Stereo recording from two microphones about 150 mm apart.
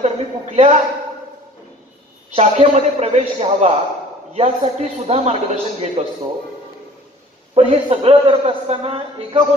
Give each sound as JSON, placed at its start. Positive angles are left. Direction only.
{"t": 0.0, "sound": "a sound", "side_deg": -50}
{"t": 2.3, "sound": "a man's voice", "side_deg": -45}
{"t": 7.5, "sound": "a man's voice", "side_deg": -40}